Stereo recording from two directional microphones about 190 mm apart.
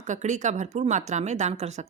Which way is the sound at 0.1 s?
40° right (ahead or behind).